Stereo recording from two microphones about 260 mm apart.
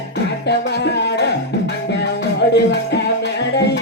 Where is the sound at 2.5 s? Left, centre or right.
Left.